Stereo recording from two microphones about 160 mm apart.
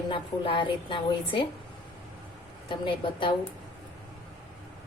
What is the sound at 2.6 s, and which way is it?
Speech, 30° left (ahead or behind).